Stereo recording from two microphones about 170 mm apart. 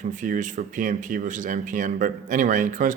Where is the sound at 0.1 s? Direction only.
50° right (ahead or behind).